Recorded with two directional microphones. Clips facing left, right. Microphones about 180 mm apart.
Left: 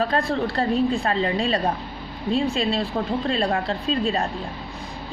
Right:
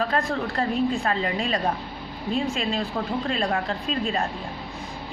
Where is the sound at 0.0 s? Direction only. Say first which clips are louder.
Left 3 dB; 35° left (ahead or behind).